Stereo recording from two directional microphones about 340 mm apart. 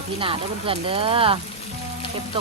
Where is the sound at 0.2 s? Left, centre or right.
Centre.